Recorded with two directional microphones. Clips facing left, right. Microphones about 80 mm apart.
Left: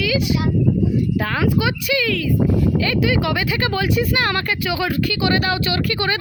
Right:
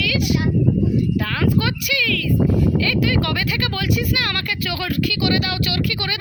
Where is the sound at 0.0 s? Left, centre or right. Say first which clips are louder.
Left 2 dB; left.